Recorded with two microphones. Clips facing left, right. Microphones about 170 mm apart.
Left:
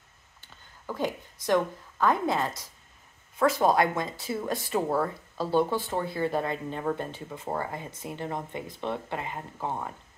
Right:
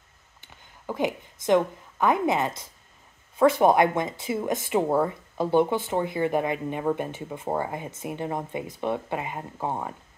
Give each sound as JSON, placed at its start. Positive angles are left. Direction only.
{"t": 0.5, "sound": "a woman's voice", "side_deg": -20}